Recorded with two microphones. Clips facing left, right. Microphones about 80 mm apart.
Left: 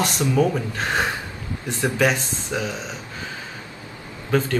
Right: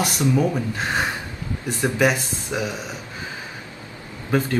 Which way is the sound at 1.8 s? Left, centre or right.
Centre.